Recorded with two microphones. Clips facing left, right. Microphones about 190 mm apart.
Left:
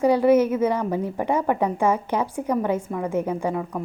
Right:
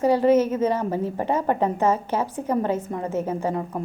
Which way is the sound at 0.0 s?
15° left (ahead or behind).